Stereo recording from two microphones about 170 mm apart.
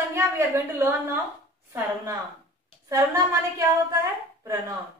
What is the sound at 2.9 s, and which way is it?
Speech, 20° right (ahead or behind).